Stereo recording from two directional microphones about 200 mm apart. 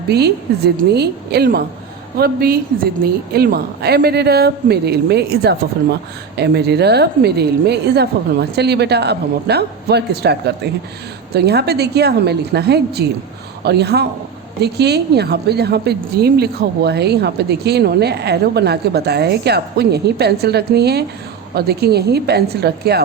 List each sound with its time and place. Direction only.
0.1 s a woman's voice: 55° right (ahead or behind)